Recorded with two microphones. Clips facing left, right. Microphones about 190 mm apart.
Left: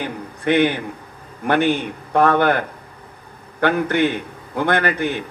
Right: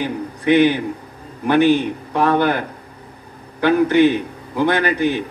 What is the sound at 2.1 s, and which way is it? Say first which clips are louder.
Speech: left 1 dB; 55° left (ahead or behind).